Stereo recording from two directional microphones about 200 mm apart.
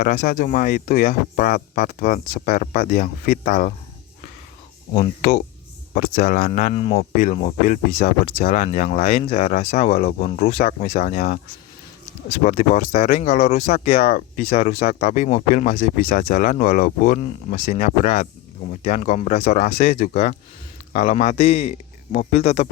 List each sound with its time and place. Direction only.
0.0 s speech: 45° left (ahead or behind)
4.9 s speech: 35° left (ahead or behind)
12.4 s speech: 45° left (ahead or behind)
13.5 s speech: 35° left (ahead or behind)
13.7 s speech: 50° left (ahead or behind); by 22.7 s 30° left (ahead or behind)